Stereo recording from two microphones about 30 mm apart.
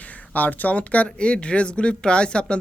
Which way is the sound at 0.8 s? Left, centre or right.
Left.